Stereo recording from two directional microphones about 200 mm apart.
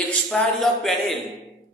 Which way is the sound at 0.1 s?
5° left (ahead or behind).